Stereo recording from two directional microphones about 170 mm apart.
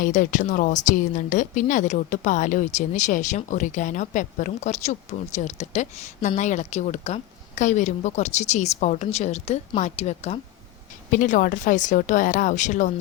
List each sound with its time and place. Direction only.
0.0 s a woman's voice: 50° left (ahead or behind)
11.1 s a woman's voice: 50° left (ahead or behind)